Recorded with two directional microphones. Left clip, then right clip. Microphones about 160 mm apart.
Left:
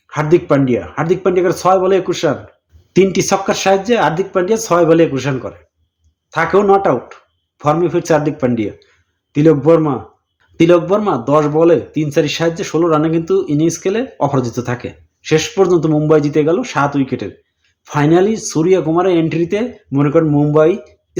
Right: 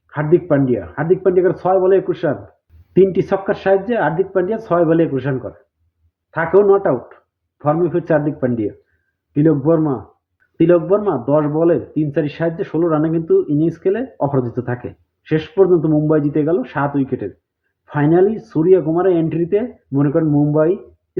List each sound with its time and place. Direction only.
0.1 s a man's voice: 20° left (ahead or behind)